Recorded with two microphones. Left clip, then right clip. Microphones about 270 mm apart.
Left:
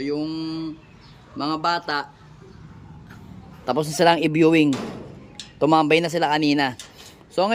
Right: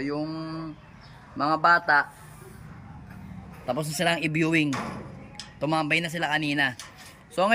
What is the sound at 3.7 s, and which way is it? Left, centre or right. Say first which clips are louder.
A man's voice: left 8 dB; centre.